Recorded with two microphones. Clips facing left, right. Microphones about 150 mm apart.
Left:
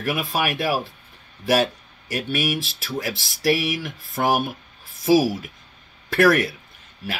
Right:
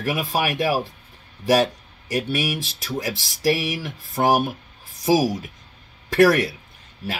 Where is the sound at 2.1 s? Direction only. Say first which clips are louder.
Right 1 dB; 40° right (ahead or behind).